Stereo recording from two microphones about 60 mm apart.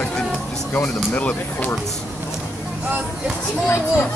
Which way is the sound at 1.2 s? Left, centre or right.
Left.